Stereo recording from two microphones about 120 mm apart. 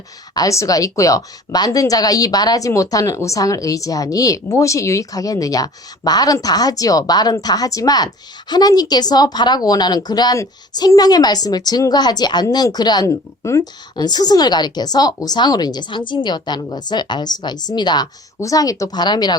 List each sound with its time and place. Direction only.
0.3 s speech: 25° left (ahead or behind)